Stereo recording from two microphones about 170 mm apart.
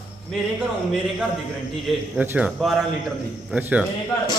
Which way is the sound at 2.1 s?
10° right (ahead or behind).